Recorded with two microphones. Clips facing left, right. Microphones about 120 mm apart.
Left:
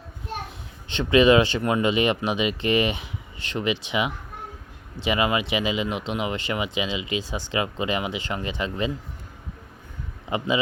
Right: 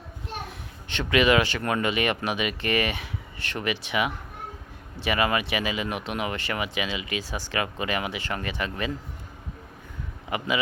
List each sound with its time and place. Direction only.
0.9 s speech: 25° left (ahead or behind)
10.2 s speech: 25° left (ahead or behind)